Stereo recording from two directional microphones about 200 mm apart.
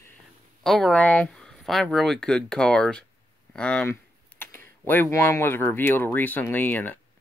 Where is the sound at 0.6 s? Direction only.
Centre (ahead or behind).